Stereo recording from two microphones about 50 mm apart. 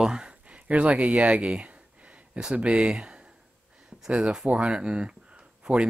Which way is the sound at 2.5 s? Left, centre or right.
Right.